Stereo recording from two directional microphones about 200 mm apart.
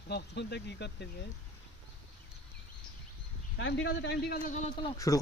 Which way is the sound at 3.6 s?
65° left (ahead or behind).